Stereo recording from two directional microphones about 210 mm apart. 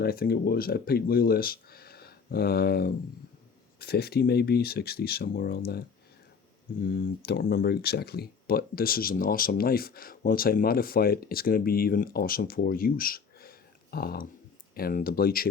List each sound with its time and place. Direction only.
0.0 s speech: 45° left (ahead or behind)
6.8 s speech: 45° left (ahead or behind)